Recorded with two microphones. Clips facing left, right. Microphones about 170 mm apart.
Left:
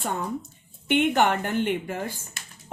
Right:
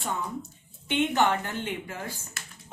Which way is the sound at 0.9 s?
60° left (ahead or behind).